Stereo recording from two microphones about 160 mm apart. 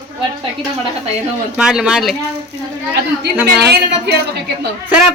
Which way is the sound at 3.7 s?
90° right.